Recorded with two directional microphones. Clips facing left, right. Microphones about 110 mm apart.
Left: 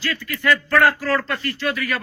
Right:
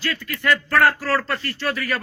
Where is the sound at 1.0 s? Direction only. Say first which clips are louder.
Left 1 dB; 35° right (ahead or behind).